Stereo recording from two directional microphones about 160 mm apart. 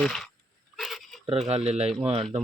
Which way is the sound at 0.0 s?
5° left (ahead or behind).